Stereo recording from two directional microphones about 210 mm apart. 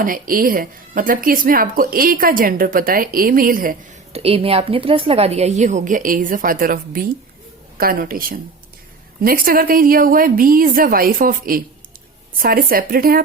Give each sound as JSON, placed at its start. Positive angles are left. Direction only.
{"t": 0.0, "sound": "speech", "side_deg": -40}
{"t": 4.1, "sound": "a woman's voice", "side_deg": -30}